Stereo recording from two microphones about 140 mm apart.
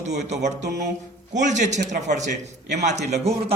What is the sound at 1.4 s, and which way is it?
A man's voice, 60° right (ahead or behind).